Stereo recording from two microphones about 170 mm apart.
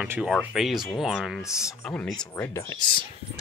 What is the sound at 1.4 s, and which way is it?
Speech, 10° left (ahead or behind).